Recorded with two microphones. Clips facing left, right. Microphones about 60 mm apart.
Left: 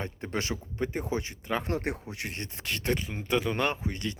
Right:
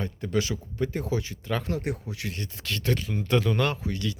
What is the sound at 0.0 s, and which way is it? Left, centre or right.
Speech, left.